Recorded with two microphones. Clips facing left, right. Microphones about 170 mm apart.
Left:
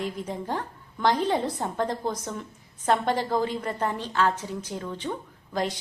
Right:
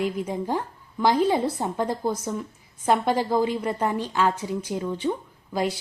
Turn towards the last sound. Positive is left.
turn(degrees=-10)  # may be behind; listen again after turning